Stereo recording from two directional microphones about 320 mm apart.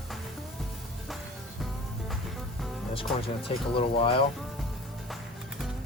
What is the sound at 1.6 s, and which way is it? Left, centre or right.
Music, centre.